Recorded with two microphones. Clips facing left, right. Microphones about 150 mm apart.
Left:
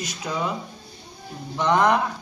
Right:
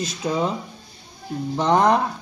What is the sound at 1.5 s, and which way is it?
Speech, 30° right (ahead or behind).